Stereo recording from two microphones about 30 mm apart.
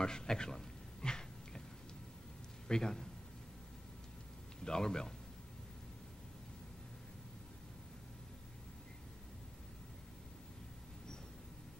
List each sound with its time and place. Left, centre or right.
0.0 s a sound: left
2.7 s speech: left
4.6 s speech: left